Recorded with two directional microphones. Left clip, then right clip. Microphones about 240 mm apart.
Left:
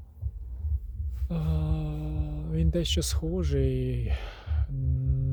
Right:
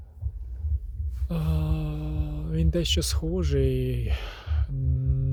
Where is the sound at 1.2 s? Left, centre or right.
Centre.